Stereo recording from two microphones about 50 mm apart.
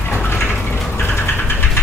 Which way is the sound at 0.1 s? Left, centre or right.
Left.